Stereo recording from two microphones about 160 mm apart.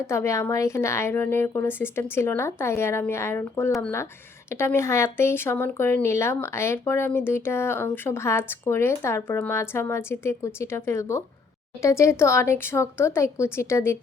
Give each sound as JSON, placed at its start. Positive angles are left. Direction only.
{"t": 0.1, "sound": "speech", "side_deg": 15}